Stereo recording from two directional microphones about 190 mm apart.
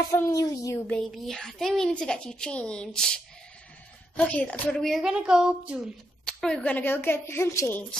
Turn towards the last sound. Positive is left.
turn(degrees=15)  # may be behind; listen again after turning